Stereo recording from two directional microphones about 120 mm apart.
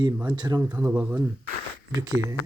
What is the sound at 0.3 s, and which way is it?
Speech, 35° right (ahead or behind).